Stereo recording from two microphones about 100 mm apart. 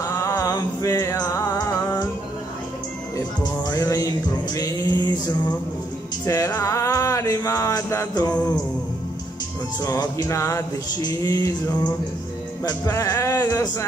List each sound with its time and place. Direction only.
0.0 s music: 35° left (ahead or behind)
3.4 s music: 45° left (ahead or behind)
4.6 s male singing: 40° left (ahead or behind)
6.2 s music: 35° left (ahead or behind)
9.8 s music: 40° left (ahead or behind)
12.8 s speech: 30° left (ahead or behind)